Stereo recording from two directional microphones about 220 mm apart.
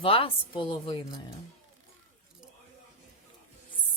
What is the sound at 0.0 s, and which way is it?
A woman's voice, 25° left (ahead or behind).